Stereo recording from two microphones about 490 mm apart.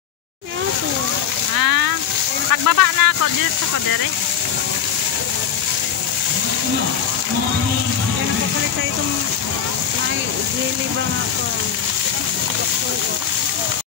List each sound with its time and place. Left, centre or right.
1.6 s speech: right